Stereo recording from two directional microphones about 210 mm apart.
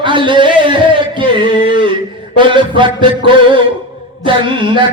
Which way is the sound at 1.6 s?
25° right (ahead or behind).